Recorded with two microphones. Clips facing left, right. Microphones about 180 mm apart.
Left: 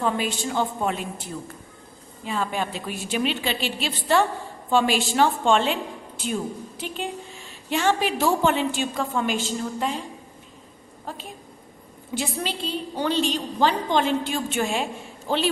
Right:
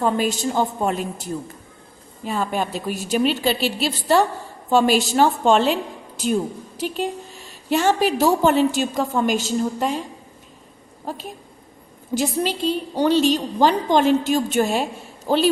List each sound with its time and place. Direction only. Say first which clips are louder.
0.0 s a woman's voice: right 5 dB; 40° right (ahead or behind)
6.7 s a woman's voice: right 10 dB; 40° right (ahead or behind)
12.1 s a woman's voice: right 7 dB; 40° right (ahead or behind)